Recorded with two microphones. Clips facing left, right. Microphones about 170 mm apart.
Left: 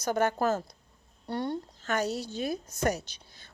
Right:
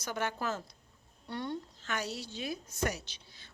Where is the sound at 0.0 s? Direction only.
45° left (ahead or behind).